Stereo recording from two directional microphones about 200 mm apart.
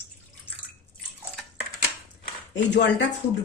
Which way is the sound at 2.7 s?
65° left (ahead or behind).